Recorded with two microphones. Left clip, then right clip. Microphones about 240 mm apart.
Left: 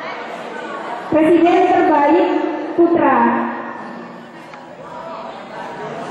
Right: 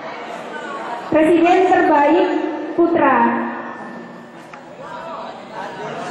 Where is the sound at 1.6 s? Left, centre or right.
Centre.